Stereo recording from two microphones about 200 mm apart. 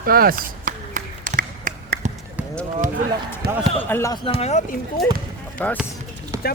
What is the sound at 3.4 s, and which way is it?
Speech, 50° right (ahead or behind).